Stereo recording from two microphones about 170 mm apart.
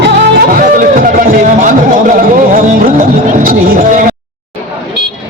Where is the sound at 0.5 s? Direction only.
50° right (ahead or behind).